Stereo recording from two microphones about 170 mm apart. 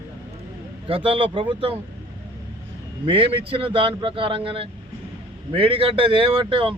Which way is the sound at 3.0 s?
30° right (ahead or behind).